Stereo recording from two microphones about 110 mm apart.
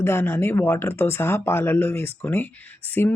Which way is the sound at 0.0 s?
20° left (ahead or behind).